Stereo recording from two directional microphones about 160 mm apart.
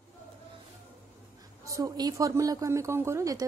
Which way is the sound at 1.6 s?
20° right (ahead or behind).